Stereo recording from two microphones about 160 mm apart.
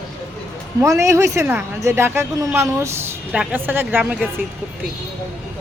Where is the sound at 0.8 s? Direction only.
20° right (ahead or behind).